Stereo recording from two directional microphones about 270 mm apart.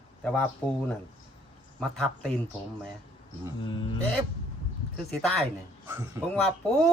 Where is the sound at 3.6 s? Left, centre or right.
Centre.